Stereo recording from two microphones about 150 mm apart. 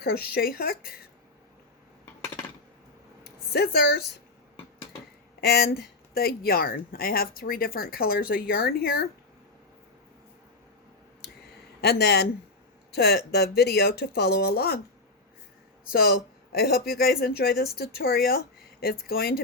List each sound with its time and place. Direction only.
0.0 s a woman's voice: 90° left
3.5 s a woman's voice: 90° left
5.4 s speech: 90° left
11.8 s a woman's voice: 90° left
15.9 s a woman's voice: 90° left